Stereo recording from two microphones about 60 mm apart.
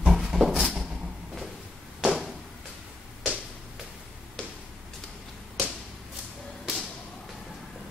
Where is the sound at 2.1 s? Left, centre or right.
Centre.